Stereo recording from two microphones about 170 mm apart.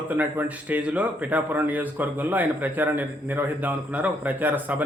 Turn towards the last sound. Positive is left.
turn(degrees=-10)  # may be behind; listen again after turning